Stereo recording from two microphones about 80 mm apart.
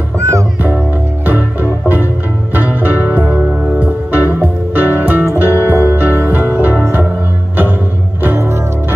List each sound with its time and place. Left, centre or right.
0.2 s music: right
1.2 s music: right
8.2 s music: right